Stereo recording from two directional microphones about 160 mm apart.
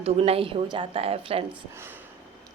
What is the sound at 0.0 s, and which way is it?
A woman's voice, 40° right (ahead or behind).